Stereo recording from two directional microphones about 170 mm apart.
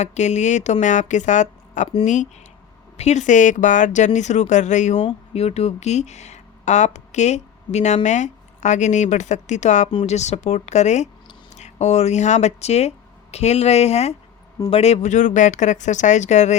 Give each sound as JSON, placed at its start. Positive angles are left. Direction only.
{"t": 0.0, "sound": "speech", "side_deg": 40}
{"t": 3.0, "sound": "a woman's voice", "side_deg": 45}